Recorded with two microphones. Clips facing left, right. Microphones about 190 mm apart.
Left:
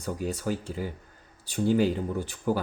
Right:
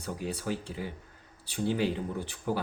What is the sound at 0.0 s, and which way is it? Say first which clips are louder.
Speech: left 4 dB; 45° left (ahead or behind).